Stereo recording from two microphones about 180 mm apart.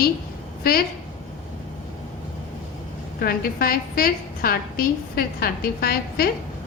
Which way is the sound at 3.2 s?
55° left (ahead or behind).